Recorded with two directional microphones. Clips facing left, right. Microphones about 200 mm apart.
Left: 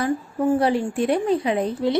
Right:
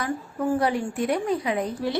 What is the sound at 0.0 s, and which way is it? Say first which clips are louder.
A woman's voice: left 5 dB; 30° left (ahead or behind).